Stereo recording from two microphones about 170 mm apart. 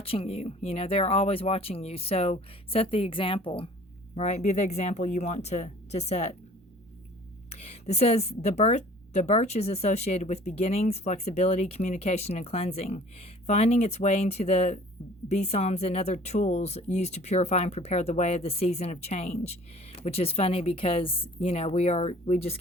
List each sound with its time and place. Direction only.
0.0 s a woman's voice: 35° left (ahead or behind)
7.5 s a woman's voice: 40° left (ahead or behind)